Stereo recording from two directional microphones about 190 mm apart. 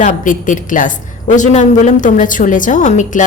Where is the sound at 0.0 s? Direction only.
40° left (ahead or behind).